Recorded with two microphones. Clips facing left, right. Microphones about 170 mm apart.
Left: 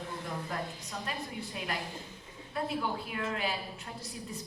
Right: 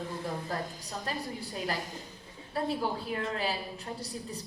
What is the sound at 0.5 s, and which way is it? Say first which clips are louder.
A woman's voice: right 2 dB; 35° right (ahead or behind).